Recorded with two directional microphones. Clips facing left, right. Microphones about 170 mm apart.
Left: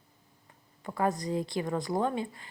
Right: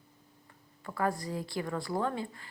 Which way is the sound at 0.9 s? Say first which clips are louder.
Left 3 dB; 20° left (ahead or behind).